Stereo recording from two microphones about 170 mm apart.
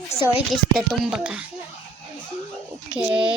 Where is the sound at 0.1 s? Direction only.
35° left (ahead or behind).